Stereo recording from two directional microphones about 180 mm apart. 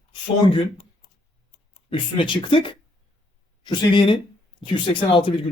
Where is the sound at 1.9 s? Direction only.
30° left (ahead or behind).